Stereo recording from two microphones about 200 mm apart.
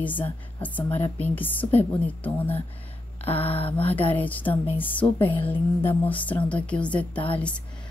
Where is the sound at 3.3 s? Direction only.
30° left (ahead or behind).